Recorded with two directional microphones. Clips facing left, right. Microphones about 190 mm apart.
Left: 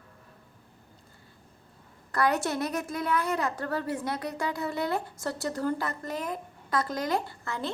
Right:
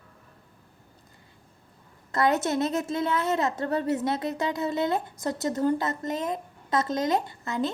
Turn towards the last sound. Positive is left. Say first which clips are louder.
# right 5 dB
turn(degrees=-20)  # may be behind; listen again after turning